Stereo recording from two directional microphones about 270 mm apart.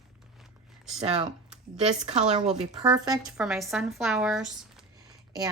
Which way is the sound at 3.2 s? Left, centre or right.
Centre.